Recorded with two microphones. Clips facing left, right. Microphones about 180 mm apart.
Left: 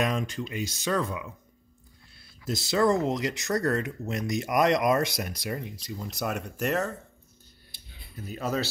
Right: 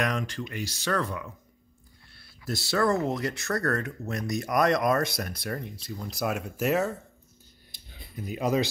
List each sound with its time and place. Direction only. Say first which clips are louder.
0.0 s speech: left 1 dB; 25° left (ahead or behind)
2.7 s speech: left 2 dB; 20° left (ahead or behind)
5.2 s speech: even; 5° left (ahead or behind)
8.2 s speech: right 4 dB; 15° right (ahead or behind)